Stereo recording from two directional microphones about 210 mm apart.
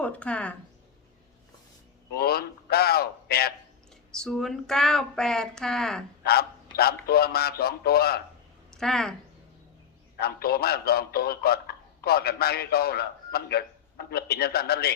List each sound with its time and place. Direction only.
0.0 s speech: 5° left (ahead or behind)
2.1 s a man's voice: 50° left (ahead or behind)
4.1 s speech: centre (ahead or behind)
6.2 s a man's voice: 50° left (ahead or behind)
8.7 s speech: centre (ahead or behind)
10.2 s a man's voice: 50° left (ahead or behind)